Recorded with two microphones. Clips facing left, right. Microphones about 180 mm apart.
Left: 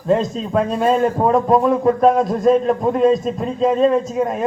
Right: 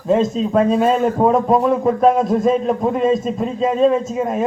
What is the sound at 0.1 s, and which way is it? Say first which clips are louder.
A man's voice: right 2 dB; centre (ahead or behind).